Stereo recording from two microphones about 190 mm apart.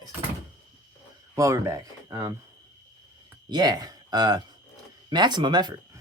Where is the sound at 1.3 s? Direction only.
15° right (ahead or behind).